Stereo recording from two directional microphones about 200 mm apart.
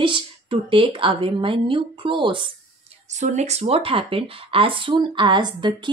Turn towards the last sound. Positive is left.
turn(degrees=-20)  # may be behind; listen again after turning